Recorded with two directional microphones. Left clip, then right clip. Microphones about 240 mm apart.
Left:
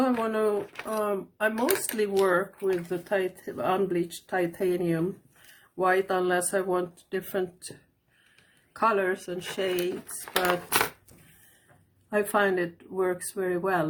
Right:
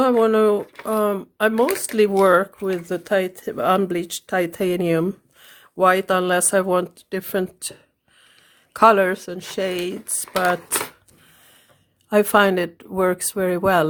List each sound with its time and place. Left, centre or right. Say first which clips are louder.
0.0 s speech: right 10 dB; right
8.7 s speech: right 10 dB; right
12.1 s speech: right 9 dB; right